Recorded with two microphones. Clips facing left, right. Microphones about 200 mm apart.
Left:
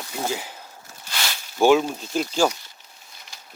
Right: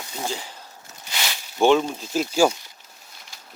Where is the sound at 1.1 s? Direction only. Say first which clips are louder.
Even; 15° right (ahead or behind).